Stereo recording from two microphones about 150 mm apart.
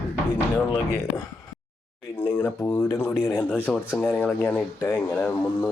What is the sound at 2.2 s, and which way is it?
Speech, 15° left (ahead or behind).